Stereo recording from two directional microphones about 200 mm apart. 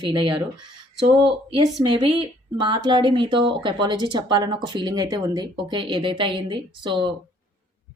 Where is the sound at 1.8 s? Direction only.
25° right (ahead or behind).